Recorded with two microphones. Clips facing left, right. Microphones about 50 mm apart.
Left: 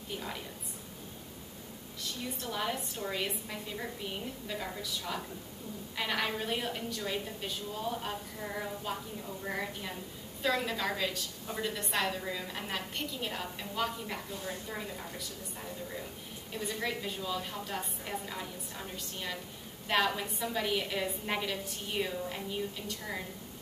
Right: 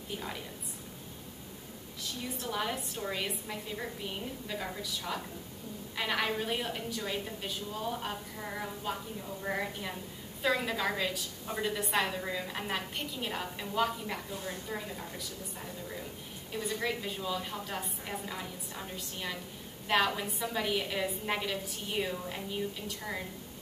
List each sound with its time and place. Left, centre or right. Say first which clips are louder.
2.4 s a woman's voice: right 1 dB; centre
16.5 s a woman's voice: right 2 dB; centre